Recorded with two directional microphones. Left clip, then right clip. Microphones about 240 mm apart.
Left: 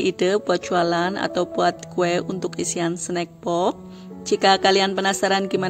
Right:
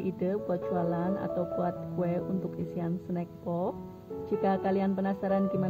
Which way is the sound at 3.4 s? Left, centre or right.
Left.